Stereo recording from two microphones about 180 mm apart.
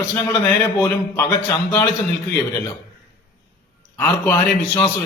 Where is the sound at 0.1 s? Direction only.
15° left (ahead or behind).